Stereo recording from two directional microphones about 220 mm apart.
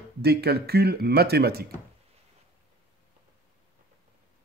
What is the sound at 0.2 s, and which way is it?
A man's voice, 45° right (ahead or behind).